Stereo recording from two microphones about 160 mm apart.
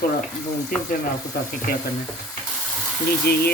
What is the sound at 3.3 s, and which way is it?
Speech, 75° left (ahead or behind).